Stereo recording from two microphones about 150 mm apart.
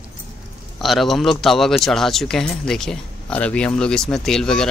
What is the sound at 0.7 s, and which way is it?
A man's voice, centre (ahead or behind).